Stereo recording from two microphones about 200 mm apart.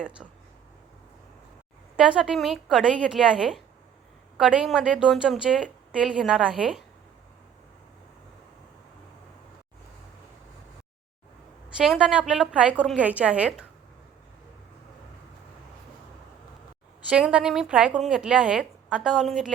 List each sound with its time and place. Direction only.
2.0 s a woman's voice: 5° right (ahead or behind)
11.8 s a woman's voice: 5° right (ahead or behind)
17.1 s a woman's voice: 5° right (ahead or behind)